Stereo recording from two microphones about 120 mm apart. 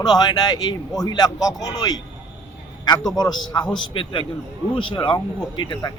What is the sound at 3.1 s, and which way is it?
A man's voice, 35° left (ahead or behind).